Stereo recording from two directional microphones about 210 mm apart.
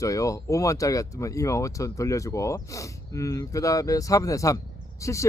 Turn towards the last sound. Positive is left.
turn(degrees=15)  # may be behind; listen again after turning